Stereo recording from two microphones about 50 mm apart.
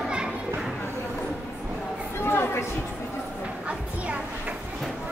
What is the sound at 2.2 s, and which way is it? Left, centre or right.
Chatter, left.